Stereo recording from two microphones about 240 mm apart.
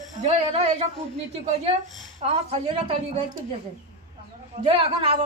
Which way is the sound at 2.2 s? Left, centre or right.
Right.